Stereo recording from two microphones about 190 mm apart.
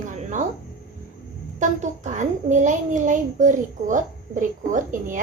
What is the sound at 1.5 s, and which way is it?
A child's voice, 40° right (ahead or behind).